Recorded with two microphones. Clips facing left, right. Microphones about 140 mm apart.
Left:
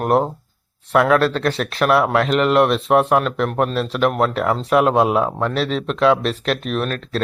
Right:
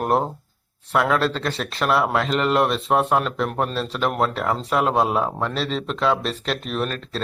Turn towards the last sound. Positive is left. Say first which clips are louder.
# left 4 dB
turn(degrees=0)  # may be behind; listen again after turning